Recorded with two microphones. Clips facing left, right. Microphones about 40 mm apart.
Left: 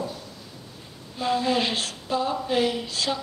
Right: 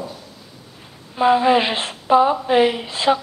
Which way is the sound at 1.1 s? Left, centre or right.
Right.